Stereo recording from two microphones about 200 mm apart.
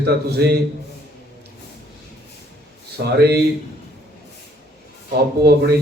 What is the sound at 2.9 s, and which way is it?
Speech, 55° right (ahead or behind).